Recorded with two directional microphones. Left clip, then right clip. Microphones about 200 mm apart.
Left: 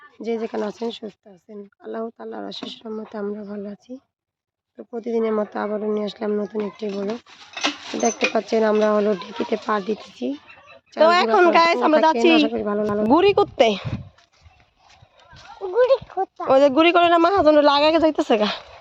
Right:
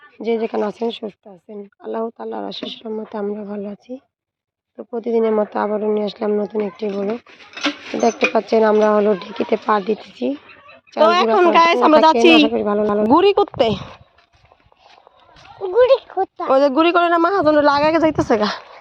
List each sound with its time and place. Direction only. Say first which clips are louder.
0.2 s speech: right 6 dB; 5° right (ahead or behind)
8.3 s speech: right 5 dB; centre (ahead or behind)
11.9 s speech: right 5 dB; 25° right (ahead or behind)
12.5 s speech: right 5 dB; 5° right (ahead or behind)
15.6 s a sound: right 4 dB; 40° right (ahead or behind)
16.5 s speech: even; centre (ahead or behind)